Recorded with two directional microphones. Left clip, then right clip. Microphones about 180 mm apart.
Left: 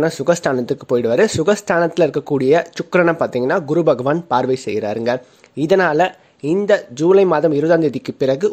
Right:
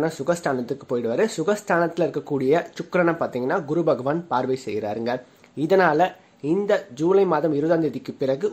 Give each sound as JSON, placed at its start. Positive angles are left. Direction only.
{"t": 0.0, "sound": "speech", "side_deg": 40}